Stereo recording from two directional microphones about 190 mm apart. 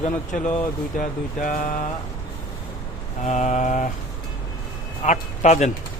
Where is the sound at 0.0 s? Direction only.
40° left (ahead or behind).